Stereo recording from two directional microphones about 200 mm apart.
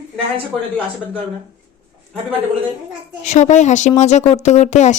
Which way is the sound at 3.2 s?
35° left (ahead or behind).